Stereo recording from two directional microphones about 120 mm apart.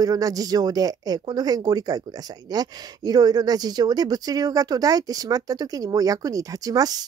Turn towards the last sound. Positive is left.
turn(degrees=-30)  # may be behind; listen again after turning